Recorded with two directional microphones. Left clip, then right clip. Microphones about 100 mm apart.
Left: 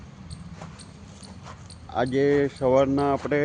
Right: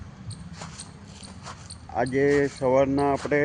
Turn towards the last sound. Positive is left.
turn(degrees=40)  # may be behind; listen again after turning